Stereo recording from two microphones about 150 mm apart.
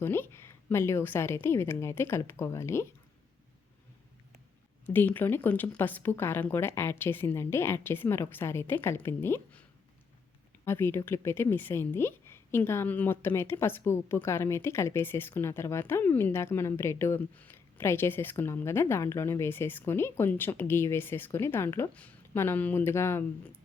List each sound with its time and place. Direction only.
0.0 s a woman's voice: 15° left (ahead or behind)
4.9 s a woman's voice: 10° left (ahead or behind)
10.7 s a woman's voice: 15° left (ahead or behind)